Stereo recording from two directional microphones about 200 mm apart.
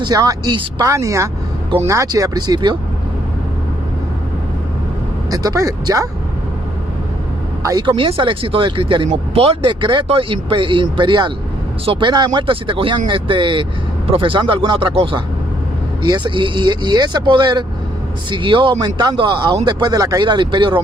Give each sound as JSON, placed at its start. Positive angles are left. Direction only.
{"t": 0.0, "sound": "speech", "side_deg": -20}
{"t": 5.3, "sound": "speech", "side_deg": -20}
{"t": 7.6, "sound": "speech", "side_deg": -20}